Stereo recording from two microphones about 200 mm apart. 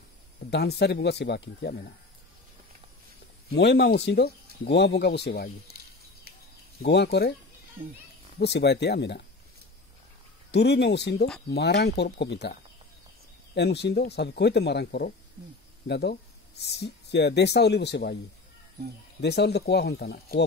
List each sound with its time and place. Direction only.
0.5 s speech: 55° left (ahead or behind)
3.5 s speech: 55° left (ahead or behind)
6.8 s speech: 55° left (ahead or behind)
8.4 s speech: 55° left (ahead or behind)
10.5 s speech: 60° left (ahead or behind)
13.6 s speech: 60° left (ahead or behind)
19.2 s speech: 55° left (ahead or behind)